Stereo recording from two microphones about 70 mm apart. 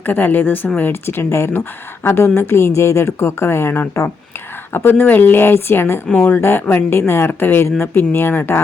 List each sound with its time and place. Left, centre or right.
0.0 s a woman's voice: left